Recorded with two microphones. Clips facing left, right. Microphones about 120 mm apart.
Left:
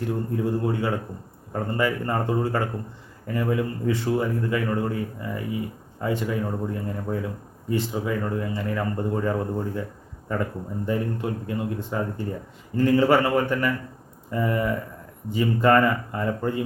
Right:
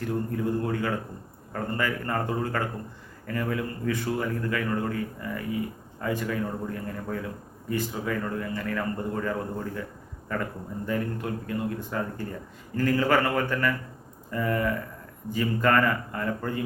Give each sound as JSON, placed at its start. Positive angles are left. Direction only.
{"t": 0.6, "sound": "a man's voice", "side_deg": 25}